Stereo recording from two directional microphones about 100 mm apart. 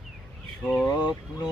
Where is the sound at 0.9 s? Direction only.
45° left (ahead or behind).